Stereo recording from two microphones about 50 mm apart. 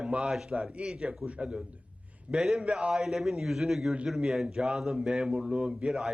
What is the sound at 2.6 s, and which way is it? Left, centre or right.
Speech, centre.